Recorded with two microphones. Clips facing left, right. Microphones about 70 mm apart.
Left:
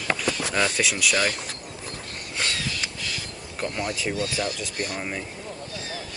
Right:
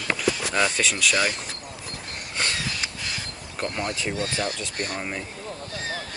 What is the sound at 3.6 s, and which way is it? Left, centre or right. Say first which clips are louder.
Speech: even; centre.